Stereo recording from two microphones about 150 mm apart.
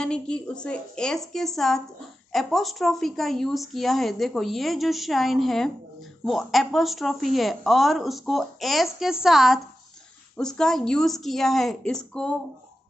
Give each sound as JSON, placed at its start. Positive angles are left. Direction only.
{"t": 0.0, "sound": "speech", "side_deg": 5}